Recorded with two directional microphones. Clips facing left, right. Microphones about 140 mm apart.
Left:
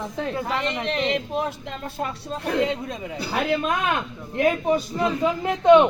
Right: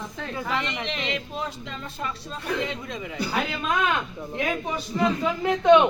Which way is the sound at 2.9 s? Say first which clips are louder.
Left 1 dB; 35° left (ahead or behind).